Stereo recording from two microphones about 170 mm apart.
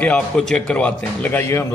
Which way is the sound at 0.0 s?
5° left (ahead or behind).